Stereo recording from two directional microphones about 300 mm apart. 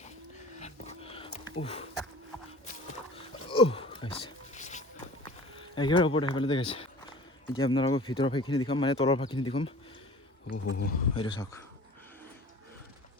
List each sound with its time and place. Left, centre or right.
0.6 s dog: centre
1.6 s speech: centre
3.2 s a sound: centre
5.7 s speech: centre
10.4 s speech: left
11.2 s speech: centre